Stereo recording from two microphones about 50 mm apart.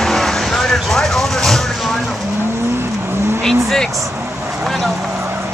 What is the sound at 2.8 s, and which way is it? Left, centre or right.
Vehicle, right.